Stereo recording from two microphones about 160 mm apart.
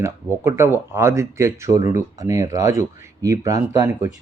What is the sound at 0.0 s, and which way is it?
Speech, 15° right (ahead or behind).